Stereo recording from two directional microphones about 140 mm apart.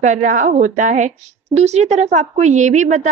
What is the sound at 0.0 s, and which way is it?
A woman's voice, 60° right (ahead or behind).